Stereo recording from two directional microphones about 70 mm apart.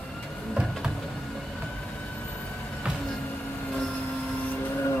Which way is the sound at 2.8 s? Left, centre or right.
Centre.